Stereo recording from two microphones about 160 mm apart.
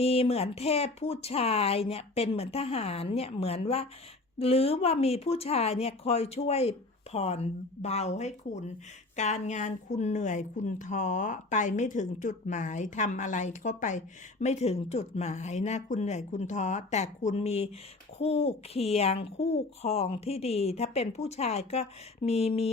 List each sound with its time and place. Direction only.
0.0 s speech: 40° left (ahead or behind)